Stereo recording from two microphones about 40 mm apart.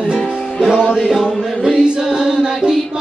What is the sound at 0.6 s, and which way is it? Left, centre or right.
Music, right.